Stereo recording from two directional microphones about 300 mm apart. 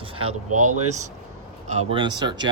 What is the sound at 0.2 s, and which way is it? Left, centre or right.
Speech, right.